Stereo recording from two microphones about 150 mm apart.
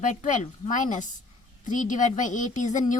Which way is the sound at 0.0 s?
55° left (ahead or behind).